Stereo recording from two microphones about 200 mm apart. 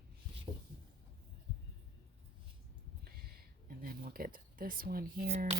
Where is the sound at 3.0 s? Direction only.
50° right (ahead or behind).